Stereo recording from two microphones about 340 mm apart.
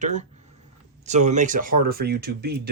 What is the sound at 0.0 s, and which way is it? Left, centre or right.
Speech, right.